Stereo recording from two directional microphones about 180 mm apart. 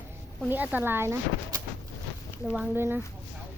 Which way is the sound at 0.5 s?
10° right (ahead or behind).